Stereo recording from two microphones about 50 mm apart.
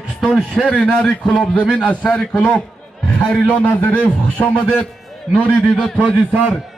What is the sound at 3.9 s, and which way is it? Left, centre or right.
Speech, left.